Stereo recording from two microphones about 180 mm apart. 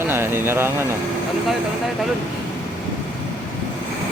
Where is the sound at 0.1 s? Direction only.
15° right (ahead or behind).